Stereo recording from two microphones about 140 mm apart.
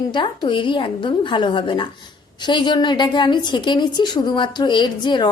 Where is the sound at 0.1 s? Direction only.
35° left (ahead or behind).